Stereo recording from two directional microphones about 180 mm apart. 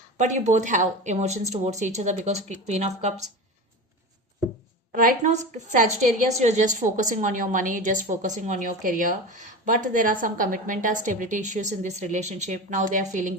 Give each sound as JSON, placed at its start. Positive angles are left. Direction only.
{"t": 0.2, "sound": "speech", "side_deg": -40}
{"t": 4.9, "sound": "a woman's voice", "side_deg": -45}